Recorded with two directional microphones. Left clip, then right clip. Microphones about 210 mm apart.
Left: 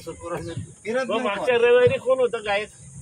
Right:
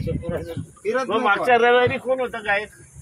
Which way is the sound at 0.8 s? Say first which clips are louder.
Right 3 dB; 25° right (ahead or behind).